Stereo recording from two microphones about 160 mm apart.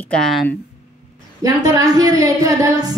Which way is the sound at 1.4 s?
20° right (ahead or behind).